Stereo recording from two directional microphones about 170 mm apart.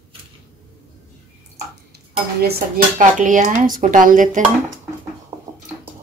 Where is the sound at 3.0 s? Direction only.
50° right (ahead or behind).